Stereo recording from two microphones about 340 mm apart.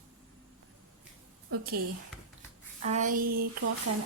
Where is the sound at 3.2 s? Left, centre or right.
Right.